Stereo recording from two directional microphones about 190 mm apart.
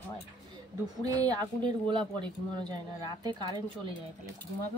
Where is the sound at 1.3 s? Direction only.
25° right (ahead or behind).